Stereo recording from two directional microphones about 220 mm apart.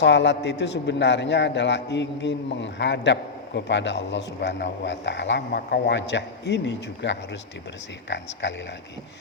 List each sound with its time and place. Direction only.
0.0 s a man's voice: 50° left (ahead or behind)